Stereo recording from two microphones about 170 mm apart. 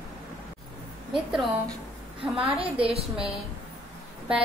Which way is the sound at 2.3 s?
35° right (ahead or behind).